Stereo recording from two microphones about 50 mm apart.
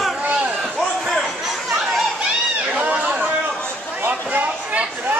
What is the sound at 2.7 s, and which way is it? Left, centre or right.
Chatter, right.